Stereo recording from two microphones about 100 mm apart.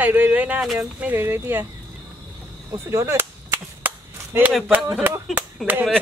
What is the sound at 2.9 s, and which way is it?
Cap gun, 30° right (ahead or behind).